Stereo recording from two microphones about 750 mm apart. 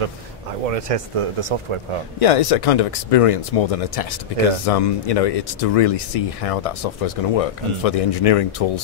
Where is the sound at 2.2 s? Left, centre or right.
Left.